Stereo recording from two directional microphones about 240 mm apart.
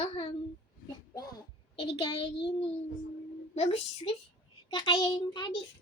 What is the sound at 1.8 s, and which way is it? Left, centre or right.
Speech, left.